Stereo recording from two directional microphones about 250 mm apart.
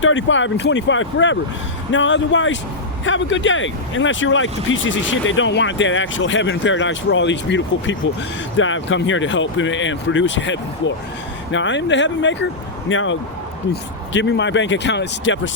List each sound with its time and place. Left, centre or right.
0.0 s speech: left